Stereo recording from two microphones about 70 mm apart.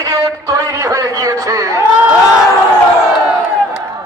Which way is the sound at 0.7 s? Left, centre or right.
Right.